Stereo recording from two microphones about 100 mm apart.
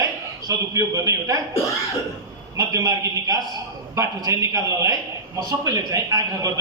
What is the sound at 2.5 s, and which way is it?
A man's voice, 35° right (ahead or behind).